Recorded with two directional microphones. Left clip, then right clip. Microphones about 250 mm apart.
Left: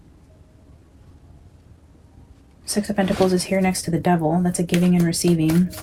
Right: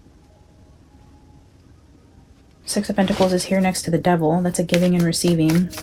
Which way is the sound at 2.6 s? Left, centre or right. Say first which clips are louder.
Right 1 dB; right.